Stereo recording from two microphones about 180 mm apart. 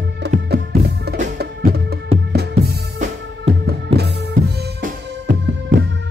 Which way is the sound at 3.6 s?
65° right (ahead or behind).